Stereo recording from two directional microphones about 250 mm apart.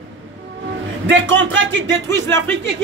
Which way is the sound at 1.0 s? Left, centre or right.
Right.